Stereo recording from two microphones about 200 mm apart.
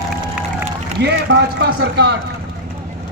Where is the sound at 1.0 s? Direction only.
55° right (ahead or behind).